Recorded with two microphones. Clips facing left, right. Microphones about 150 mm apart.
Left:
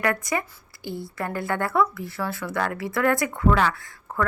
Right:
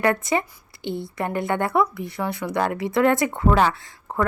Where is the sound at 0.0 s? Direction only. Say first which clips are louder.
Right 4 dB; 25° right (ahead or behind).